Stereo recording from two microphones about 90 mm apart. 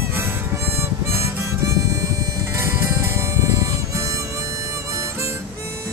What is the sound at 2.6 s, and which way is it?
Music, 35° right (ahead or behind).